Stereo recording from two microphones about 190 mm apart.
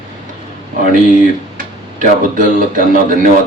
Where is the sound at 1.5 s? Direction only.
45° right (ahead or behind).